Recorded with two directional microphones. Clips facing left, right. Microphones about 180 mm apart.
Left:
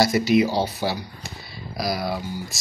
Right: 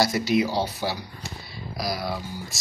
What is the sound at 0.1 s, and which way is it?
Speech, 15° left (ahead or behind).